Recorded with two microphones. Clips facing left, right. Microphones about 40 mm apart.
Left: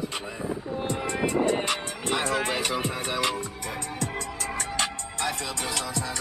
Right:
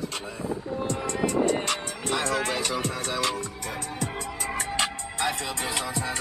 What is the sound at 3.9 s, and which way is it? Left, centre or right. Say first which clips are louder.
Music: even; centre.